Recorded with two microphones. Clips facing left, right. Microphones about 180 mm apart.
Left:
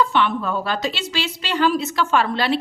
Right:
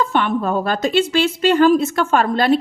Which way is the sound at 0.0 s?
45° right (ahead or behind).